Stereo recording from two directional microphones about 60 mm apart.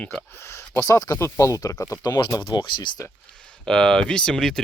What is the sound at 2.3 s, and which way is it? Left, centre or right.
Speech, left.